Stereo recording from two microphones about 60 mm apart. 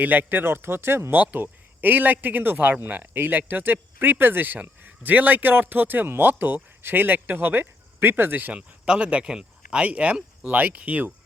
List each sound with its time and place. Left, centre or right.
0.0 s speech: right
1.2 s speech: right
8.5 s speech: centre